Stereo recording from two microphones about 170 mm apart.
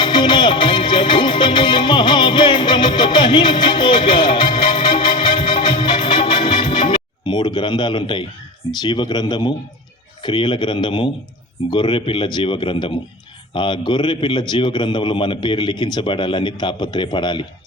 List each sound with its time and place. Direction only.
0.0 s music: 25° left (ahead or behind)
8.8 s a man's voice: 25° left (ahead or behind)